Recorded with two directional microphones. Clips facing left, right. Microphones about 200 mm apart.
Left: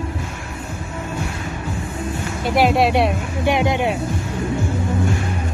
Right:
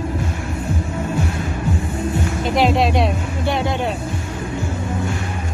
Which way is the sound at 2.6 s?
10° left (ahead or behind).